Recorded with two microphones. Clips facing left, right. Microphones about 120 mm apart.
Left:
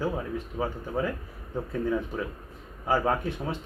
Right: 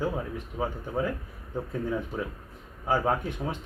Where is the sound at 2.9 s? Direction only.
15° right (ahead or behind).